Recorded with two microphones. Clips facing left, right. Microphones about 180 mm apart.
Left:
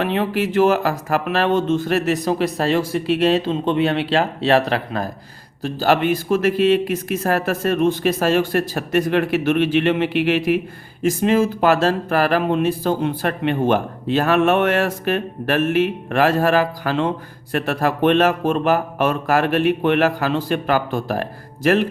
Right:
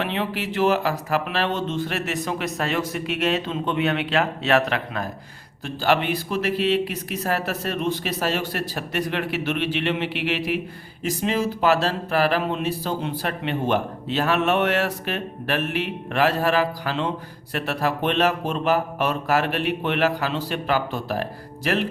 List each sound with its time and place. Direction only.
0.0 s speech: 45° left (ahead or behind)